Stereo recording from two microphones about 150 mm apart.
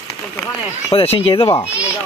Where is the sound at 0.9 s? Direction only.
40° left (ahead or behind).